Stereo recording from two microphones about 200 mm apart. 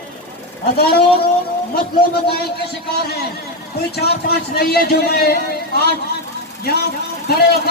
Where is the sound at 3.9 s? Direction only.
55° left (ahead or behind).